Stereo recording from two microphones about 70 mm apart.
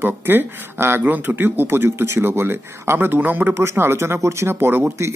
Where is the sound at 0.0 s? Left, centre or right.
Right.